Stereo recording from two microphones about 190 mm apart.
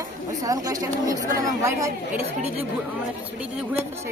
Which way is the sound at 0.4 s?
20° right (ahead or behind).